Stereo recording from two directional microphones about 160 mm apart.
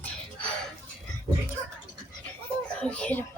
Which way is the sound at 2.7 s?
5° left (ahead or behind).